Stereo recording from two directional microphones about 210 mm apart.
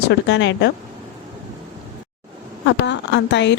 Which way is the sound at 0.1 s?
60° left (ahead or behind).